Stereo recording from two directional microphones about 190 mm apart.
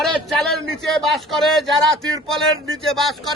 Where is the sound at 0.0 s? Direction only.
Centre (ahead or behind).